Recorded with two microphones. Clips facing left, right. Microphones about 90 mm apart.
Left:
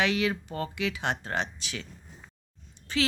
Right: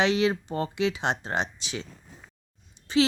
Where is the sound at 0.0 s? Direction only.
25° right (ahead or behind).